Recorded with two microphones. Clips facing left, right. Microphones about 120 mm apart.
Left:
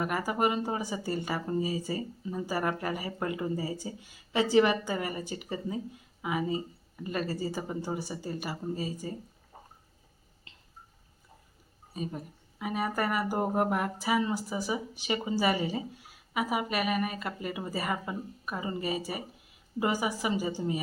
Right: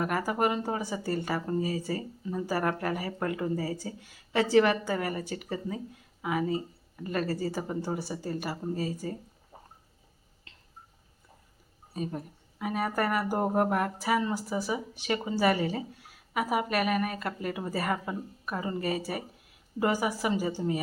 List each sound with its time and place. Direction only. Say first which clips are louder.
0.0 s a woman's voice: right 1 dB; 5° left (ahead or behind)
1.2 s speech: right 1 dB; 10° left (ahead or behind)
7.0 s speech: right 2 dB; 10° left (ahead or behind)
7.5 s a woman's voice: right 2 dB; centre (ahead or behind)
9.0 s speech: right 2 dB; 15° left (ahead or behind)
11.9 s a woman's voice: right 2 dB; 5° left (ahead or behind)